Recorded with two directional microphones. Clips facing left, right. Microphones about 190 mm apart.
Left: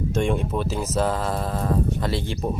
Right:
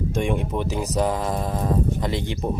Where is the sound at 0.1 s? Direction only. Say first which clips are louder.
Left 2 dB; 15° right (ahead or behind).